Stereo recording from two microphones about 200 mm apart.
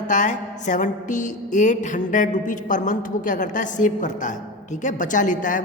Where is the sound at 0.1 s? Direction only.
40° left (ahead or behind).